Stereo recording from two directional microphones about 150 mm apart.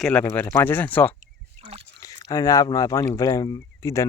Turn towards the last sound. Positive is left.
turn(degrees=20)  # may be behind; listen again after turning